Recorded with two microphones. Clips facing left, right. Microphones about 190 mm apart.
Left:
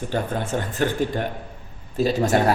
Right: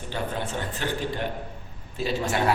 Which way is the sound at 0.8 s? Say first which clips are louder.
Left 7 dB; 50° left (ahead or behind).